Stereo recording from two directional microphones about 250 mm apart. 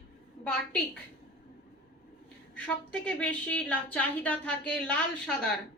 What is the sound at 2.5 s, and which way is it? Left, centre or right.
A woman's voice, centre.